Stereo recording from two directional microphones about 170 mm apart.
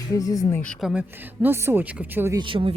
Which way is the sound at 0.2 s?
20° left (ahead or behind).